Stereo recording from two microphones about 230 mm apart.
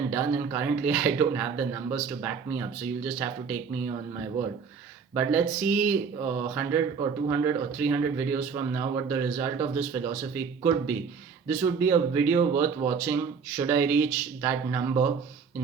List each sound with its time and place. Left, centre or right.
0.1 s speech: centre
5.1 s speech: centre